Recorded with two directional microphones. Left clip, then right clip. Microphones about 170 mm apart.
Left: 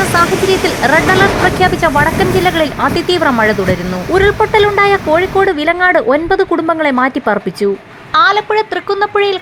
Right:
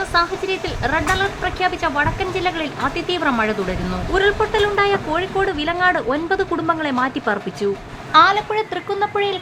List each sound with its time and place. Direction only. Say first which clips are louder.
0.1 s a woman's voice: left 8 dB; 45° left (ahead or behind); by 9.3 s 25° left (ahead or behind)